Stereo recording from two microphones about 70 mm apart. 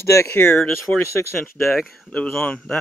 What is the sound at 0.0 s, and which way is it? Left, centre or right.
Speech, left.